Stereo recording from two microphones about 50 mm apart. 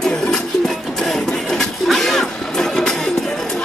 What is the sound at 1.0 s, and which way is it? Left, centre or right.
Music, centre.